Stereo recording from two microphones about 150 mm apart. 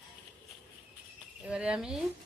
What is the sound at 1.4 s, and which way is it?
Speech, 5° right (ahead or behind).